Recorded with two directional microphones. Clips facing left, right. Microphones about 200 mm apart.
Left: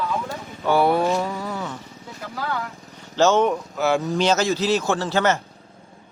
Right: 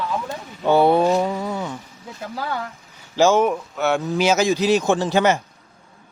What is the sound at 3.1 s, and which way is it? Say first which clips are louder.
A man's voice: right 1 dB; 10° right (ahead or behind).